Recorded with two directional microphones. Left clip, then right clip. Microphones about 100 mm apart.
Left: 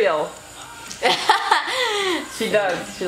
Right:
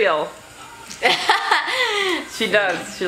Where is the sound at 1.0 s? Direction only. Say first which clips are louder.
Even; centre (ahead or behind).